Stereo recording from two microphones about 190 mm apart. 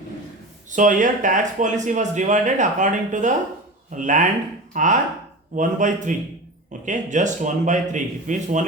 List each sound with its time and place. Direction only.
0.7 s a man's voice: 40° right (ahead or behind)